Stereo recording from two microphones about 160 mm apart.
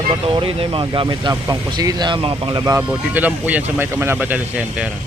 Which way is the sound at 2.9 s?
10° right (ahead or behind).